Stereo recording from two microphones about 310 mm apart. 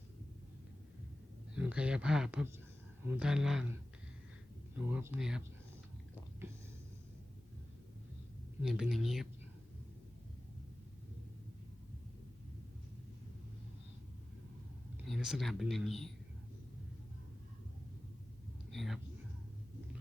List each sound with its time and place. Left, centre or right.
1.5 s speech: centre
4.8 s speech: centre
8.6 s speech: centre
15.0 s speech: centre
18.7 s speech: centre